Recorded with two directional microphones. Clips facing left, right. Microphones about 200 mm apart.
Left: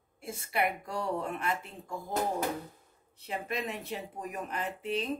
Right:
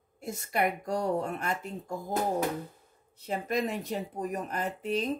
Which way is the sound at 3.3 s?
40° right (ahead or behind).